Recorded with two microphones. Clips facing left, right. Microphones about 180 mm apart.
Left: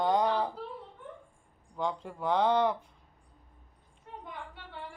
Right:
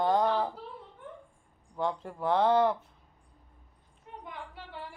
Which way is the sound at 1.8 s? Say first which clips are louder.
Right 2 dB; 5° right (ahead or behind).